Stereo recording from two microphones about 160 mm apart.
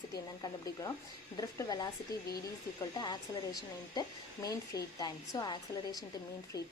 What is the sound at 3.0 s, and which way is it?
A woman's voice, 25° left (ahead or behind).